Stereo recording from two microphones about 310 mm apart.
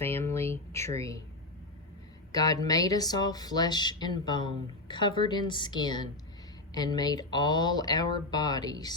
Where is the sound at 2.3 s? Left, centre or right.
Centre.